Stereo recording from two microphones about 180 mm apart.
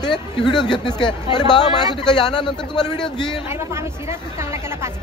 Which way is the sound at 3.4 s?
15° right (ahead or behind).